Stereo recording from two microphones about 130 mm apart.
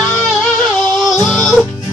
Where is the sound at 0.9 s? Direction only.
Centre (ahead or behind).